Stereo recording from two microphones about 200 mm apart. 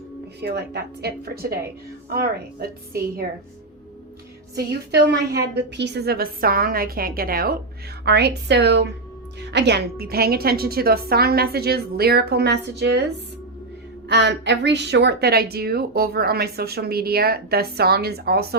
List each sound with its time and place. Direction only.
0.4 s a woman's voice: 55° right (ahead or behind)
4.5 s a woman's voice: 55° right (ahead or behind)
14.1 s a woman's voice: 60° right (ahead or behind)